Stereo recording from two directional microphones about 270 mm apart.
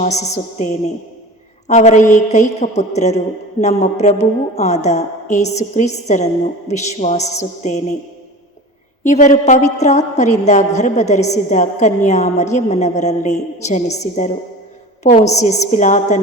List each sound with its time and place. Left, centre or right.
0.0 s a woman's voice: left
9.0 s a woman's voice: left